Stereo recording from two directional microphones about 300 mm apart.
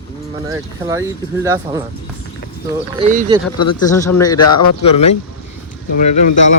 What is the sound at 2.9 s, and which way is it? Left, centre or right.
Speech, right.